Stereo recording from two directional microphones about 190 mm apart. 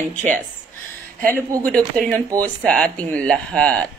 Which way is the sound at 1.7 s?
5° left (ahead or behind).